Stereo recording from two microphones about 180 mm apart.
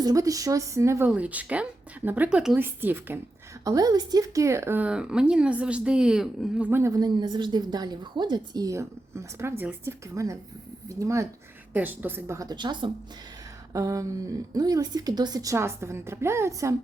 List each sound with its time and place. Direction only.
0.0 s a woman's voice: 20° right (ahead or behind)